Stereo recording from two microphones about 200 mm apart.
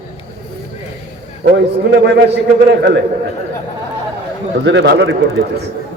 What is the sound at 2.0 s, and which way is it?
Speech, 60° right (ahead or behind).